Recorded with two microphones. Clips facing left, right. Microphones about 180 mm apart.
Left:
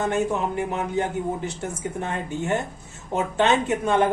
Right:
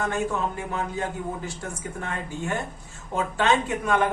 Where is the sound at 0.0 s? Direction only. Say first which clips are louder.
Left 3 dB; 20° left (ahead or behind).